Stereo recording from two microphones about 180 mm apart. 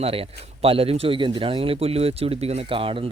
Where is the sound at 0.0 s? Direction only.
30° right (ahead or behind).